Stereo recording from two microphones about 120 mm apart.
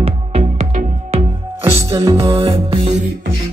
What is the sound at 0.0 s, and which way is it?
Music, 60° right (ahead or behind).